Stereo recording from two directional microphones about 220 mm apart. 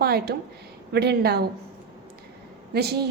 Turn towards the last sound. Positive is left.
turn(degrees=-45)  # may be behind; listen again after turning